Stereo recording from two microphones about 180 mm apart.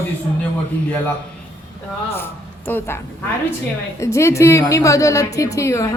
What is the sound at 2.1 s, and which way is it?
A woman's voice, 10° left (ahead or behind).